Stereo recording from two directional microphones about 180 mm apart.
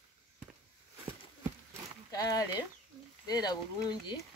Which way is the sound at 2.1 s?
20° left (ahead or behind).